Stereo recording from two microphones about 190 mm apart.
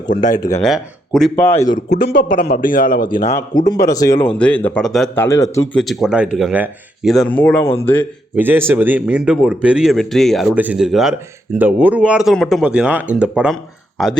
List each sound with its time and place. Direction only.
0.3 s speech: 45° left (ahead or behind)
0.6 s a man's voice: centre (ahead or behind)
2.3 s speech: 50° left (ahead or behind)
3.7 s speech: 20° left (ahead or behind)
5.7 s a man's voice: centre (ahead or behind)
8.4 s a man's voice: 10° right (ahead or behind)